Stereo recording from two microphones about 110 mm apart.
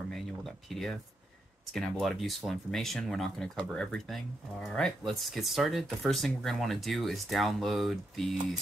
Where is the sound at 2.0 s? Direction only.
Centre (ahead or behind).